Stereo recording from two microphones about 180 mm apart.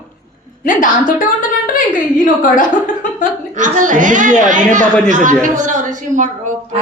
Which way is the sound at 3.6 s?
45° right (ahead or behind).